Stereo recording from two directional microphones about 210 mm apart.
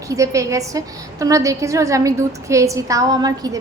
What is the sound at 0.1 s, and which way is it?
A woman's voice, 15° right (ahead or behind).